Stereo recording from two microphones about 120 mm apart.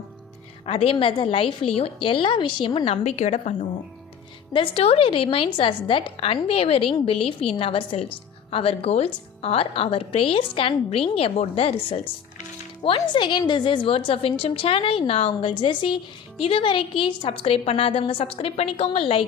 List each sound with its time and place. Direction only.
0.6 s a woman's voice: 50° left (ahead or behind); by 3.5 s 65° left (ahead or behind)
4.5 s a woman's voice: 50° left (ahead or behind)